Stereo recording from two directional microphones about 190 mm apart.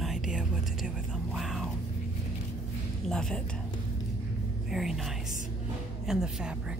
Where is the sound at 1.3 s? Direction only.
Centre (ahead or behind).